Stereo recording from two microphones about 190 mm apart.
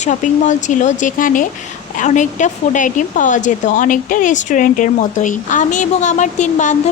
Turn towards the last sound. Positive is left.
turn(degrees=40)  # may be behind; listen again after turning